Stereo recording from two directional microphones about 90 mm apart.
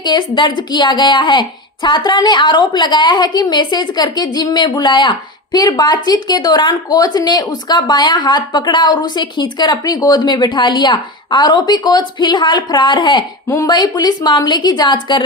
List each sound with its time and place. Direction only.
0.0 s speech: 55° left (ahead or behind)